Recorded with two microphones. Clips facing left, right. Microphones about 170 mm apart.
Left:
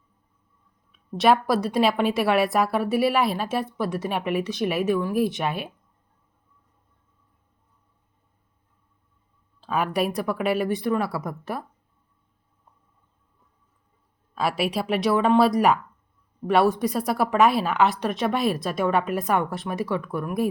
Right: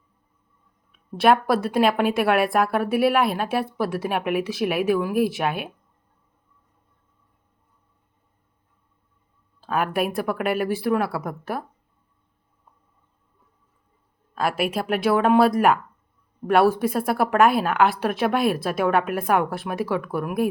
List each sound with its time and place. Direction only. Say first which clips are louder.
0.9 s a woman's voice: right 1 dB; centre (ahead or behind)
9.6 s a woman's voice: right 1 dB; centre (ahead or behind)
14.3 s a woman's voice: right 1 dB; centre (ahead or behind)